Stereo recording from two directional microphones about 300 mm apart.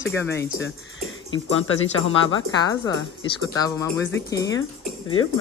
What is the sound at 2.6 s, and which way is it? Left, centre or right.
A woman's voice, centre.